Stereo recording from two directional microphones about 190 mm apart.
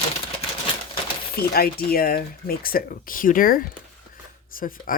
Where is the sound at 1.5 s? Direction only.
55° left (ahead or behind).